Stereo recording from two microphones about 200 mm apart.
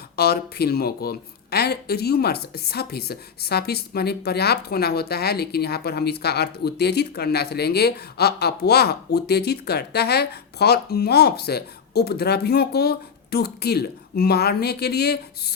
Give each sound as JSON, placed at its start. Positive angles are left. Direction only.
{"t": 0.2, "sound": "speech", "side_deg": 50}